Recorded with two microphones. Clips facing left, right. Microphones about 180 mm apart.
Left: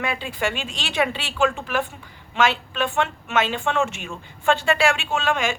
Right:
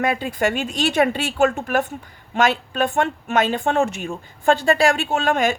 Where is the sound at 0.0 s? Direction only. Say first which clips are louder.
Right 5 dB; 45° right (ahead or behind).